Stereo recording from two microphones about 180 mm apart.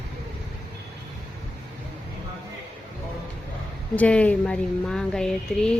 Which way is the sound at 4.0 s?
5° left (ahead or behind).